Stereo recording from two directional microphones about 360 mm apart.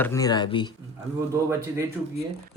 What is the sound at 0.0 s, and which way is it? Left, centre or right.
Speech, centre.